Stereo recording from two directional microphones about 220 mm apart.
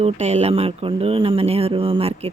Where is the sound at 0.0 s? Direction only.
30° right (ahead or behind).